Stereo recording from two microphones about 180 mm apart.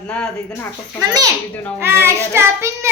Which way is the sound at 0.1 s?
10° left (ahead or behind).